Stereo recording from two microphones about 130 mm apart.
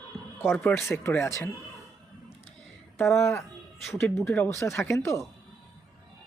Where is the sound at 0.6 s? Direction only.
20° left (ahead or behind).